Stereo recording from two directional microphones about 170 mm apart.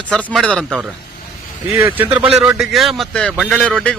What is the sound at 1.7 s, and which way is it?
A man's voice, 15° right (ahead or behind).